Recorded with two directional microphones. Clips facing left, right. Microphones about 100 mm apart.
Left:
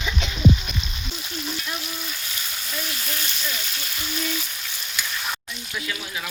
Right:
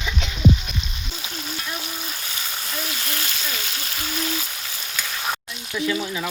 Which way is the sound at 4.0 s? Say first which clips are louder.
Right 1 dB; 40° right (ahead or behind).